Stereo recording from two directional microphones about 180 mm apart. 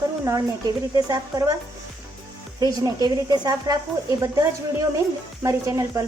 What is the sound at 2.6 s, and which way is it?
Speech, 20° right (ahead or behind).